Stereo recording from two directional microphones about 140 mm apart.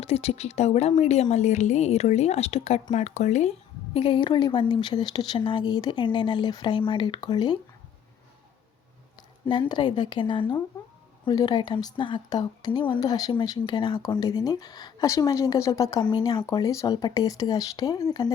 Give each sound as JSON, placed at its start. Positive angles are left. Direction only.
{"t": 0.0, "sound": "speech", "side_deg": 45}
{"t": 3.9, "sound": "speech", "side_deg": 40}
{"t": 9.5, "sound": "speech", "side_deg": 35}